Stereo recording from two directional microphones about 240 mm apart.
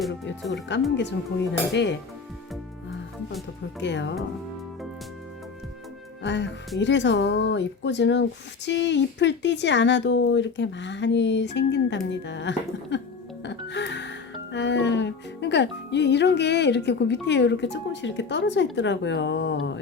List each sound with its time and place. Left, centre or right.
0.7 s speech: left
3.8 s speech: left
6.2 s speech: left
13.4 s music: left
14.5 s speech: left